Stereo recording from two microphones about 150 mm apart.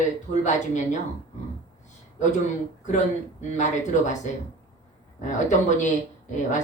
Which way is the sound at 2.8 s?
55° left (ahead or behind).